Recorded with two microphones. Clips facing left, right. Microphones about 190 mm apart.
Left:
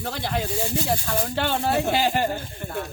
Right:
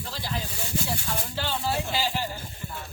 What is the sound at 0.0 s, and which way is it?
Speech, 65° left (ahead or behind).